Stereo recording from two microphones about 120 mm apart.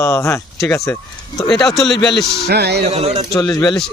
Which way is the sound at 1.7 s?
5° left (ahead or behind).